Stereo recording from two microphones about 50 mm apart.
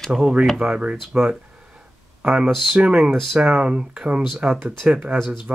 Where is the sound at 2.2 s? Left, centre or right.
Right.